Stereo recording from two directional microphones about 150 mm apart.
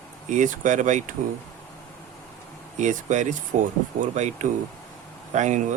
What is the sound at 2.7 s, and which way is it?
Speech, 55° right (ahead or behind).